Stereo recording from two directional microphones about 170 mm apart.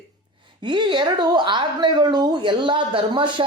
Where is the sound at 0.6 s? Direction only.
25° right (ahead or behind).